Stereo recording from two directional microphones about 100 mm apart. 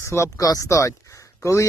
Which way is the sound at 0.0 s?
30° left (ahead or behind).